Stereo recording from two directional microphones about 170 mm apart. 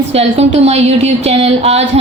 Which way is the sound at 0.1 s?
40° right (ahead or behind).